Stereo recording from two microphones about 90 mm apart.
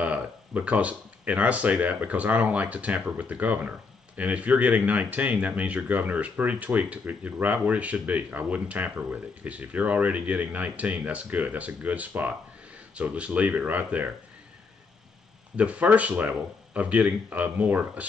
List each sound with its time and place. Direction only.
0.0 s speech: 15° right (ahead or behind)
15.5 s speech: 15° right (ahead or behind)